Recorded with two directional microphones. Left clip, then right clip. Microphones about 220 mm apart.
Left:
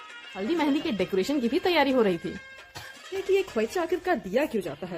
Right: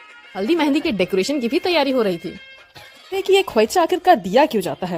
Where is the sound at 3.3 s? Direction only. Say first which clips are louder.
Right 10 dB; 40° right (ahead or behind).